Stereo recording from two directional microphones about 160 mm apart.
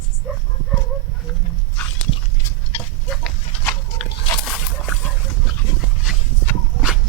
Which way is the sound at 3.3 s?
Centre (ahead or behind).